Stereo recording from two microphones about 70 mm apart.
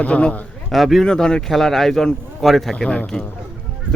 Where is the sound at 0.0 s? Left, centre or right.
Centre.